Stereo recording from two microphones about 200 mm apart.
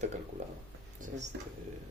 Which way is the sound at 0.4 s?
35° right (ahead or behind).